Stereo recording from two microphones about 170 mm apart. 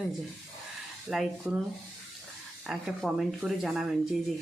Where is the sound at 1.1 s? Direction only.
5° right (ahead or behind).